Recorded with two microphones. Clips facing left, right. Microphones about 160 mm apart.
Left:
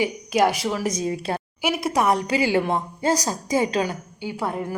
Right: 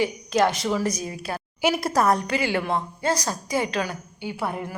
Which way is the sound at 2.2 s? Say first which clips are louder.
Left 3 dB; 15° left (ahead or behind).